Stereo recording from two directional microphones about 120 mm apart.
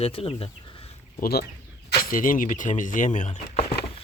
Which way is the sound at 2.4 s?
90° left.